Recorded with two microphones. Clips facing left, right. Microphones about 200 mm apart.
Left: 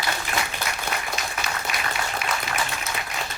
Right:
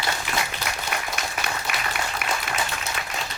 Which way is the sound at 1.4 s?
55° right (ahead or behind).